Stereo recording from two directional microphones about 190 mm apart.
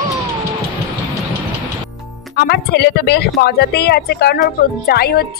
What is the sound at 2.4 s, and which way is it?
A woman's voice, 60° left (ahead or behind).